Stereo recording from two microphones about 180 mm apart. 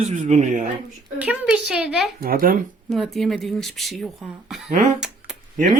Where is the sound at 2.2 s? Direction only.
55° right (ahead or behind).